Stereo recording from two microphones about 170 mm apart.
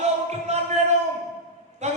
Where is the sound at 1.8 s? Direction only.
40° right (ahead or behind).